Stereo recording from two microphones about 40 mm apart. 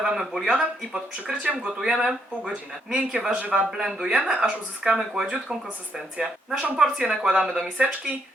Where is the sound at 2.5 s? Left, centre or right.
Right.